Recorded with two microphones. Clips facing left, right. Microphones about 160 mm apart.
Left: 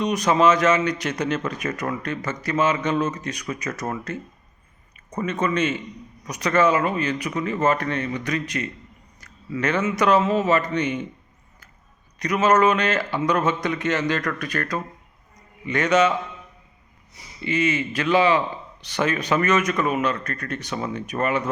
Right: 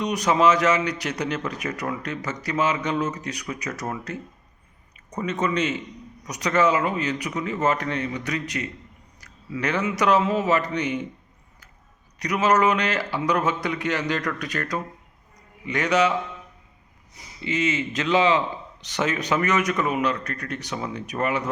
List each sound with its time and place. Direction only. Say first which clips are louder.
0.0 s speech: left 1 dB; 15° right (ahead or behind)
5.1 s speech: left 1 dB; 15° right (ahead or behind)
12.2 s speech: left 2 dB; 15° right (ahead or behind)
17.4 s speech: left 2 dB; 20° right (ahead or behind)